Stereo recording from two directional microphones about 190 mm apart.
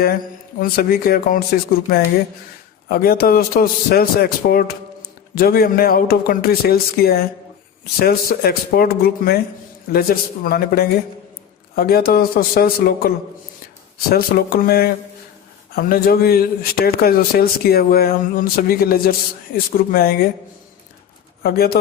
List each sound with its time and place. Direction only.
0.6 s speech: 50° left (ahead or behind)
21.4 s speech: 55° left (ahead or behind)